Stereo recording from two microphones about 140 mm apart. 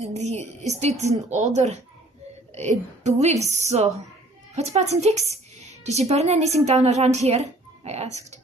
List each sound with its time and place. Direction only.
0.0 s speech: 50° right (ahead or behind)